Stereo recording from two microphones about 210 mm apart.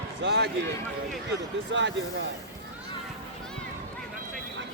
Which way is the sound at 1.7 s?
60° right (ahead or behind).